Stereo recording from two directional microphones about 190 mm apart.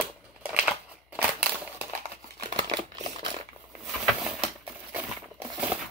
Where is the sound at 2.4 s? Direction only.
25° right (ahead or behind).